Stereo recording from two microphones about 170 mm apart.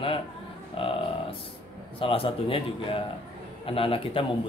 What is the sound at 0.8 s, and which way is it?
Music, 30° left (ahead or behind).